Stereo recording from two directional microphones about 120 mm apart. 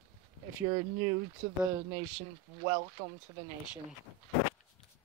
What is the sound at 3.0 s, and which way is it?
Speech, 55° right (ahead or behind).